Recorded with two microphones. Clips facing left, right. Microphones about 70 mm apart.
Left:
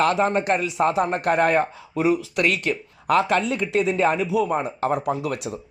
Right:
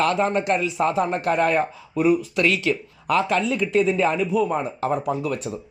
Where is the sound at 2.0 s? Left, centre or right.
Left.